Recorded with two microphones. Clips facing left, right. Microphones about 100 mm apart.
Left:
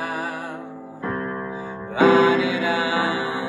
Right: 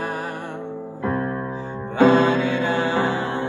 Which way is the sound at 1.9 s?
10° left (ahead or behind).